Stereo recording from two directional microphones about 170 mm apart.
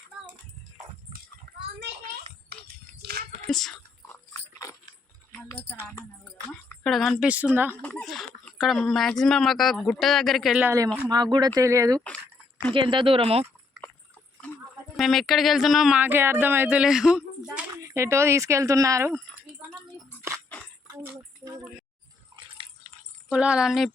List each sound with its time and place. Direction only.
2.5 s a sound: 70° right (ahead or behind)
3.5 s speech: centre (ahead or behind)
4.0 s dog: 15° left (ahead or behind)
5.5 s speech: 15° left (ahead or behind)
6.8 s speech: centre (ahead or behind)
7.7 s speech: 10° left (ahead or behind)
8.0 s speech: centre (ahead or behind)
11.1 s speech: 25° right (ahead or behind)
14.9 s speech: centre (ahead or behind)
17.7 s speech: 15° right (ahead or behind)
21.0 s a sound: 15° right (ahead or behind)
22.3 s a sound: 25° right (ahead or behind)
23.3 s speech: 5° right (ahead or behind)